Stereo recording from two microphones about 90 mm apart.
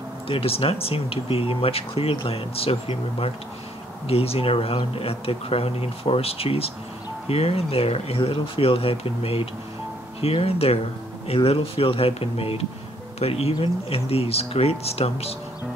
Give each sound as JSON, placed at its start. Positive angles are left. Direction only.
{"t": 0.3, "sound": "speech", "side_deg": 90}